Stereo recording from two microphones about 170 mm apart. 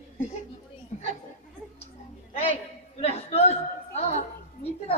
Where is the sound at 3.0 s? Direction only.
40° left (ahead or behind).